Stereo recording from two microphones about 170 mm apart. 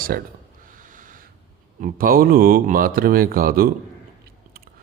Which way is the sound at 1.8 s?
55° right (ahead or behind).